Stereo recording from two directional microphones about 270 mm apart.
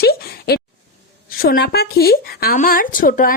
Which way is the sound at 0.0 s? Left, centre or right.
Left.